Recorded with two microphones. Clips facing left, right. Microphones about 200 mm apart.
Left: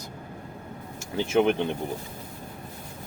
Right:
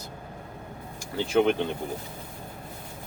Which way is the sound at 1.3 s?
20° left (ahead or behind).